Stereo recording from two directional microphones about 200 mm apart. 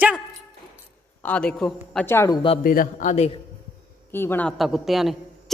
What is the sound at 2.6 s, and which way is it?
Speech, 45° left (ahead or behind).